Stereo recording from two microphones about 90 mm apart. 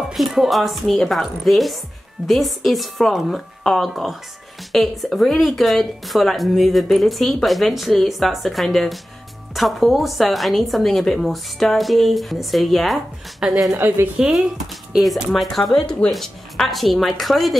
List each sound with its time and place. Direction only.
0.1 s speech: centre (ahead or behind)
13.7 s a woman's voice: 25° right (ahead or behind)
14.1 s speech: 10° right (ahead or behind)